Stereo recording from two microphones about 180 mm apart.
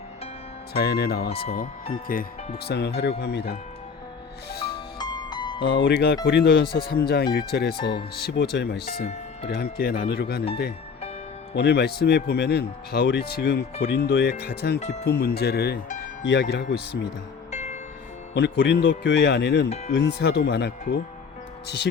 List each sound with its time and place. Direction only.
0.7 s speech: 60° left (ahead or behind)
2.6 s speech: 70° left (ahead or behind)
4.5 s music: 60° left (ahead or behind)
4.9 s music: 25° left (ahead or behind)
5.6 s speech: 70° left (ahead or behind)
11.5 s speech: 65° left (ahead or behind)
17.5 s music: 40° left (ahead or behind)
18.3 s speech: 70° left (ahead or behind)